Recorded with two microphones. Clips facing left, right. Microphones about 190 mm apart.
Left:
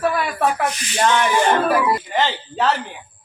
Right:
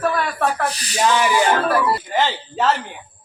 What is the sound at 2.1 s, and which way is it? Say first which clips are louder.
Speech: even; centre (ahead or behind).